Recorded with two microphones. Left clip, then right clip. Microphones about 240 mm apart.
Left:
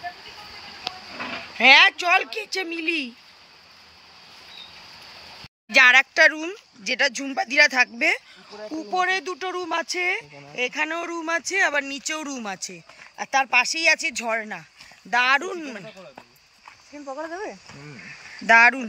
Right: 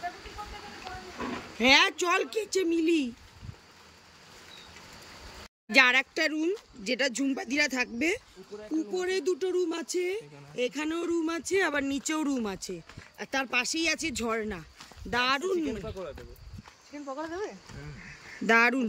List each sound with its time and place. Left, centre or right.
1.6 s speech: centre
5.7 s speech: centre
17.1 s speech: left
18.5 s speech: centre